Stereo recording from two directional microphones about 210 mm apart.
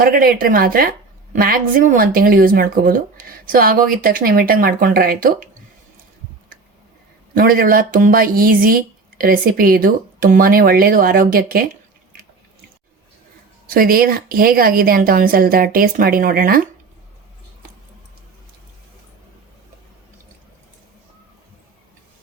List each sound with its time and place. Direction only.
0.0 s a woman's voice: 45° right (ahead or behind)
7.3 s a woman's voice: 45° right (ahead or behind)
13.7 s a woman's voice: 45° right (ahead or behind)